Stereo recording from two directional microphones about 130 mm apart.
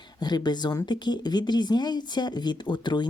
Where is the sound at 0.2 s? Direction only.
35° left (ahead or behind).